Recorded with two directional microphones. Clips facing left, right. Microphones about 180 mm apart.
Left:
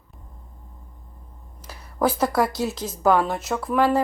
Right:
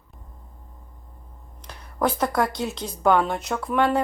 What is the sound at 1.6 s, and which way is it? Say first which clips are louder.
A woman's voice: left 2 dB; 5° left (ahead or behind).